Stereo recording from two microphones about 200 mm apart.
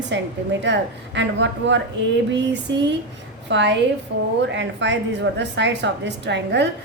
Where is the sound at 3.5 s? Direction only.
65° right (ahead or behind).